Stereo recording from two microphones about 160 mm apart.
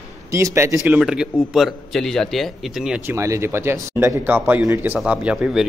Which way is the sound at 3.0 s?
15° right (ahead or behind).